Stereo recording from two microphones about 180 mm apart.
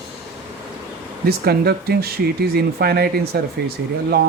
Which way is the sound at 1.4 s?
60° right (ahead or behind).